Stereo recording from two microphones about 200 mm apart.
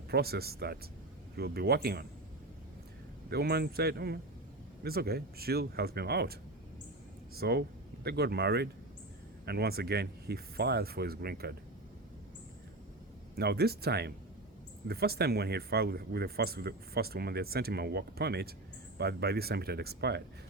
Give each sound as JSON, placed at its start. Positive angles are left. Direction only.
{"t": 0.1, "sound": "speech", "side_deg": -50}
{"t": 3.2, "sound": "speech", "side_deg": -55}
{"t": 7.3, "sound": "speech", "side_deg": -55}
{"t": 13.3, "sound": "speech", "side_deg": -55}